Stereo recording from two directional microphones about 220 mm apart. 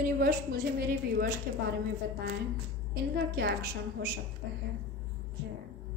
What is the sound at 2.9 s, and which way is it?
A woman's voice, 45° right (ahead or behind).